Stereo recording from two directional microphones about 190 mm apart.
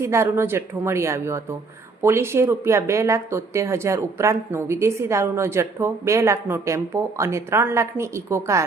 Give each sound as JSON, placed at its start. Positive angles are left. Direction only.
{"t": 0.0, "sound": "speech", "side_deg": -15}